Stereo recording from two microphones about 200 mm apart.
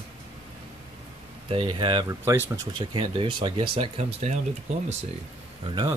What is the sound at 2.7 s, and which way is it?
Speech, 25° right (ahead or behind).